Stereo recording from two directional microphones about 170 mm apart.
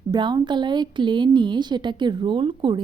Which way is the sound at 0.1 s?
25° right (ahead or behind).